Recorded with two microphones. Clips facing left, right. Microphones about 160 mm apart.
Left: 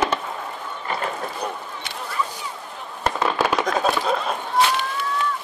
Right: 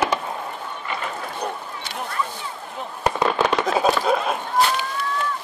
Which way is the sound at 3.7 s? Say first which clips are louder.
Right 2 dB; 10° right (ahead or behind).